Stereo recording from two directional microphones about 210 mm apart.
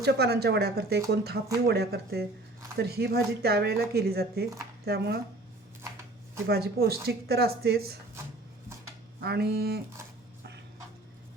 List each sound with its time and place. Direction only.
0.0 s speech: 50° right (ahead or behind)
6.5 s speech: 50° right (ahead or behind)
9.2 s speech: 50° right (ahead or behind)